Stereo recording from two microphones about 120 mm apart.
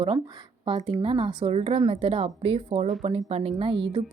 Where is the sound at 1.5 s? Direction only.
60° right (ahead or behind); by 4.0 s 45° right (ahead or behind).